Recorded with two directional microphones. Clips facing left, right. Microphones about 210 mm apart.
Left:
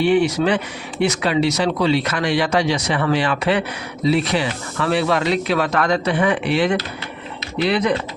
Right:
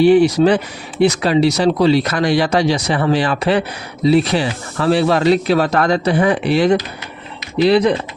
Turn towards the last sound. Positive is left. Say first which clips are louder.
# right 6 dB
turn(degrees=-35)  # may be behind; listen again after turning